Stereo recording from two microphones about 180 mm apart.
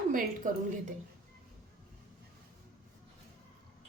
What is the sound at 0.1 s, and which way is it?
Speech, 50° right (ahead or behind).